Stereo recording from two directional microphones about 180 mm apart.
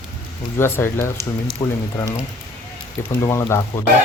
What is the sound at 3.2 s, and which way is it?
Speech, 15° left (ahead or behind).